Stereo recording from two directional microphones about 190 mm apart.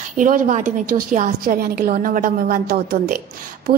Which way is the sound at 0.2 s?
45° right (ahead or behind).